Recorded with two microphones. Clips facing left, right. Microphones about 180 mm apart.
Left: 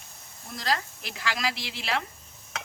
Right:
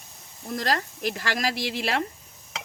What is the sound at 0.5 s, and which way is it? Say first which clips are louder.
Speech: right 3 dB; 45° right (ahead or behind).